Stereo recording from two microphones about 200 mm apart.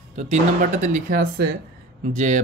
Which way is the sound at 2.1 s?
40° right (ahead or behind).